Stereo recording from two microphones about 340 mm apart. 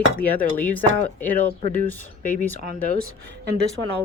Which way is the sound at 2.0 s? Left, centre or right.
Left.